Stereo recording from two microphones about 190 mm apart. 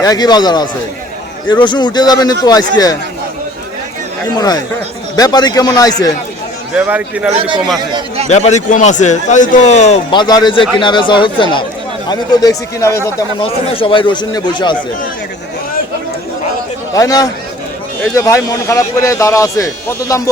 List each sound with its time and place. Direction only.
0.0 s a man's voice: 20° left (ahead or behind)
4.4 s a man's voice: 20° left (ahead or behind)
6.7 s a man's voice: 5° right (ahead or behind)
7.8 s a man's voice: 25° right (ahead or behind)
8.3 s a man's voice: 35° left (ahead or behind)
10.1 s a man's voice: 20° left (ahead or behind)
13.4 s a man's voice: 25° left (ahead or behind)
16.9 s speech: 20° left (ahead or behind)